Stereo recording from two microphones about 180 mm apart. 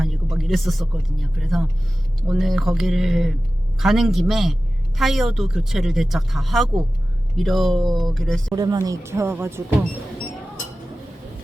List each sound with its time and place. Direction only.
0.0 s speech: centre (ahead or behind)
8.5 s speech: 20° right (ahead or behind)